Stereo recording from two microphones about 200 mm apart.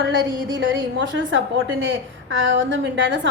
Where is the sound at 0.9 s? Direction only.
70° right (ahead or behind).